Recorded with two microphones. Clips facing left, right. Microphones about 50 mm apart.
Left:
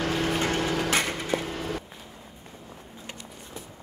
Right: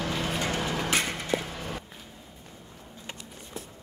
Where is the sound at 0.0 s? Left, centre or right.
Left.